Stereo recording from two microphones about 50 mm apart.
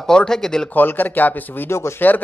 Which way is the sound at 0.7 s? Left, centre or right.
Left.